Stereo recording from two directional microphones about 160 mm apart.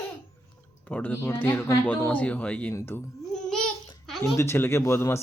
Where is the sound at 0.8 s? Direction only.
10° left (ahead or behind).